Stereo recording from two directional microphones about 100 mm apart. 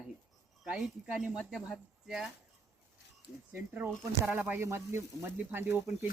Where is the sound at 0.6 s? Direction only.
5° right (ahead or behind).